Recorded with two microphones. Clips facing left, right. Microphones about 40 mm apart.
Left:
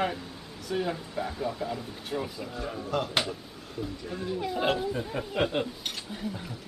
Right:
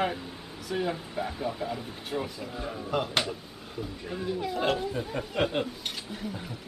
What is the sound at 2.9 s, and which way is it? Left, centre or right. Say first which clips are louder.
Speech: right 1 dB; centre.